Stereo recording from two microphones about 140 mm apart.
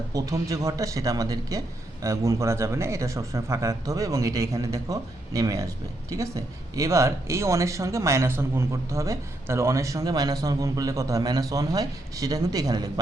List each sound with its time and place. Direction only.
0.1 s speech: 25° right (ahead or behind)